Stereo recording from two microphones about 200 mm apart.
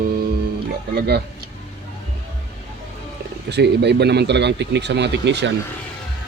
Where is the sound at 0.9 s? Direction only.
55° right (ahead or behind).